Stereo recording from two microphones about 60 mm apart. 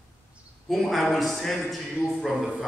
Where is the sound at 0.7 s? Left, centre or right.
Centre.